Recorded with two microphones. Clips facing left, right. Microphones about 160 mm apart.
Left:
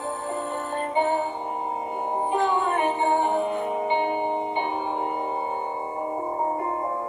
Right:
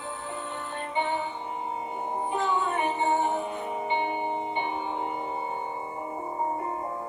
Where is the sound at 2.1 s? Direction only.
60° left (ahead or behind).